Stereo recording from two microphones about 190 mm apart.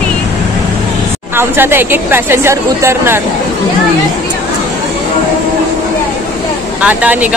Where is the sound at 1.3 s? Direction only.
10° right (ahead or behind).